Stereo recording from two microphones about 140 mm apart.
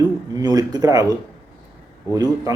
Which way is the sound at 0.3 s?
25° right (ahead or behind).